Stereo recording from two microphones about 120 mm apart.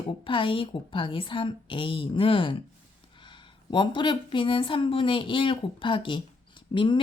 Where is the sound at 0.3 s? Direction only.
45° left (ahead or behind).